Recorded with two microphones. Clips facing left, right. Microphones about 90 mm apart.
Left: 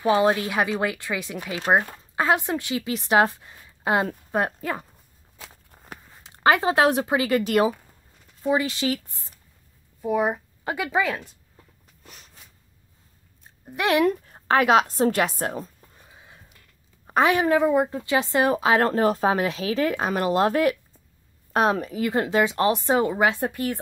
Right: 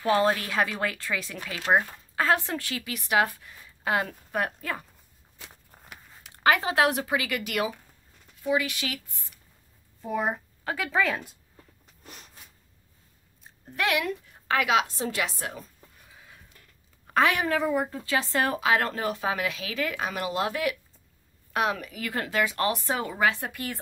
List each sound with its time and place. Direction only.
0.0 s a woman's voice: 20° left (ahead or behind)
6.2 s speech: 30° left (ahead or behind)
10.0 s speech: 5° left (ahead or behind)
10.6 s speech: 20° left (ahead or behind)
13.8 s speech: 40° left (ahead or behind)
16.0 s chicken: 25° left (ahead or behind)
17.0 s speech: 20° left (ahead or behind)
18.6 s speech: 35° left (ahead or behind)